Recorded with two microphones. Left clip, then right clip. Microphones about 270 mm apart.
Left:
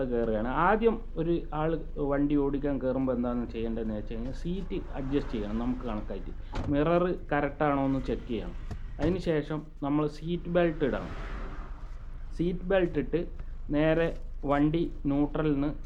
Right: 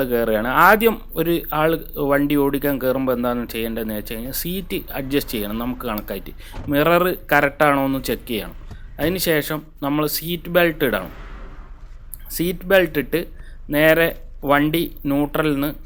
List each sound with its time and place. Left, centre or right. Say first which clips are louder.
0.0 s speech: right 10 dB; right
11.1 s a sound: right 1 dB; centre
12.3 s speech: right 11 dB; right